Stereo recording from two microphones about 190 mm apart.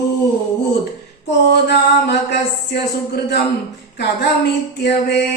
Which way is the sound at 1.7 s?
60° left (ahead or behind).